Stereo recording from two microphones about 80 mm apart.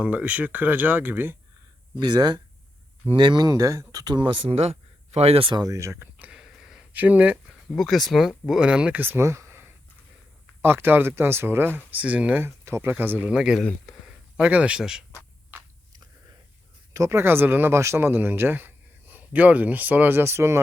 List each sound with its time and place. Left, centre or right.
0.0 s speech: centre
2.0 s speech: right
4.0 s speech: right
5.4 s speech: right
5.6 s speech: right
6.1 s a sound: centre
6.4 s a sound: centre
6.9 s speech: right
7.7 s speech: centre
12.4 s speech: right; by 13.6 s centre
13.6 s speech: centre
14.0 s speech: centre
16.9 s speech: right